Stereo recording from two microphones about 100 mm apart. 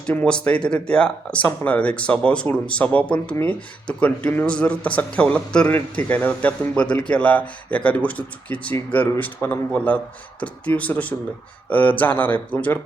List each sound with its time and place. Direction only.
0.0 s a man's voice: 15° left (ahead or behind)